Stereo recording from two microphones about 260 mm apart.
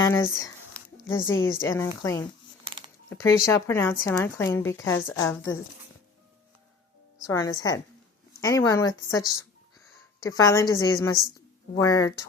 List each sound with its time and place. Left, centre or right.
0.0 s speech: centre
1.0 s a woman's voice: left
1.7 s speech: centre
7.3 s speech: centre